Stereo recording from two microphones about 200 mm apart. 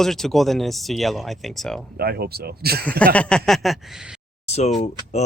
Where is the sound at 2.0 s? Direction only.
50° right (ahead or behind).